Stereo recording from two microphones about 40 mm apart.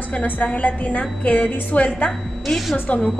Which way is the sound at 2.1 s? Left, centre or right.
Centre.